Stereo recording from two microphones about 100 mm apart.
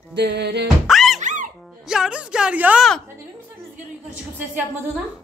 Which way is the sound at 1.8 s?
5° right (ahead or behind).